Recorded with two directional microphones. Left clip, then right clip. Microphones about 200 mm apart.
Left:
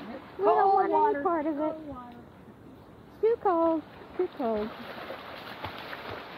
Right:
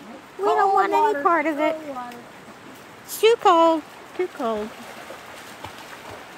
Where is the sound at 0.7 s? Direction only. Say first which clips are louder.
Right 5 dB; 25° right (ahead or behind).